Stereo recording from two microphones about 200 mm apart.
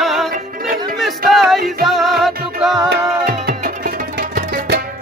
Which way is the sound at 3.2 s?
50° right (ahead or behind).